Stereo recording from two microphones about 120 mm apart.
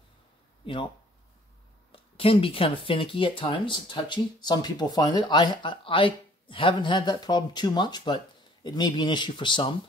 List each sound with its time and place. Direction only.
1.9 s speech: 50° left (ahead or behind)